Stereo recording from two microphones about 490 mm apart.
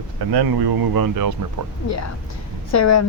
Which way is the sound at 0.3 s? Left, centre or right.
Right.